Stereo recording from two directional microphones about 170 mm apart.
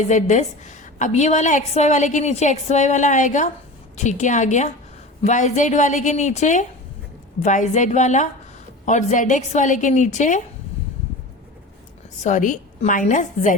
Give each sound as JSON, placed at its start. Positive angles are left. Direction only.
{"t": 0.0, "sound": "a woman's voice", "side_deg": 45}
{"t": 12.2, "sound": "a woman's voice", "side_deg": 45}